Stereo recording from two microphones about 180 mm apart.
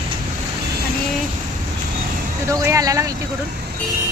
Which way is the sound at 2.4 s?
15° right (ahead or behind).